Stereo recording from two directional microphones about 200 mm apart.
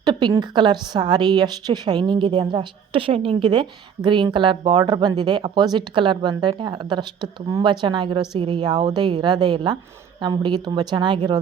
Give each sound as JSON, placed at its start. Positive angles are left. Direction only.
{"t": 0.0, "sound": "a woman's voice", "side_deg": -20}